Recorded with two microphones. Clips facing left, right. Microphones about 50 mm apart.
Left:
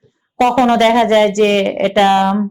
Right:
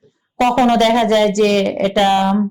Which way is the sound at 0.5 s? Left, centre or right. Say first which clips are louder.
Left 1 dB; left.